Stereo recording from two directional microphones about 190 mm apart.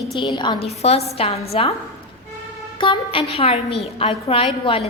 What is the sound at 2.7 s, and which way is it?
A woman's voice, 25° left (ahead or behind).